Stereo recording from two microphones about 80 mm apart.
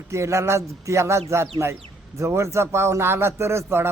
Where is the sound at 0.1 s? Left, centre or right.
Right.